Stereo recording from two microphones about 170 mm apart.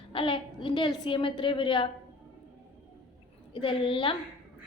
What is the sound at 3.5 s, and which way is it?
Speech, 30° left (ahead or behind).